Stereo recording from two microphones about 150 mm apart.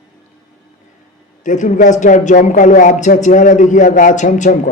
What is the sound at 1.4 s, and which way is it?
Speech, 55° left (ahead or behind).